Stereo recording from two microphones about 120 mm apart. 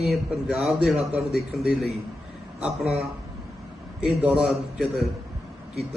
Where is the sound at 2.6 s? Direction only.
5° right (ahead or behind).